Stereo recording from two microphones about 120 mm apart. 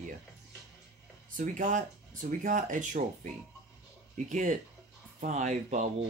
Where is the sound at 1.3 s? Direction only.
90° right.